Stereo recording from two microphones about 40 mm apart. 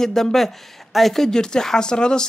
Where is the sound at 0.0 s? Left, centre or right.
Centre.